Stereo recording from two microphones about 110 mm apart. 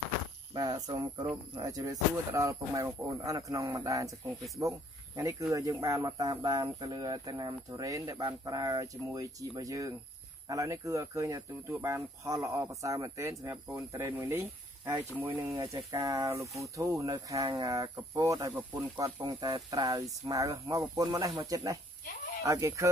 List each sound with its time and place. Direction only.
0.6 s speech: 35° right (ahead or behind)
15.3 s speech: 30° right (ahead or behind)